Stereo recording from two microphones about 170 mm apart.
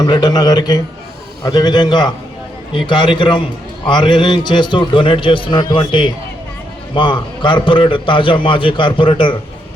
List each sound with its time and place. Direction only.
0.0 s a man's voice: 25° left (ahead or behind)